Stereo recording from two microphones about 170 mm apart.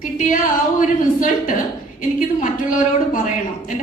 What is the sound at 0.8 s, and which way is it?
A woman's voice, 50° left (ahead or behind).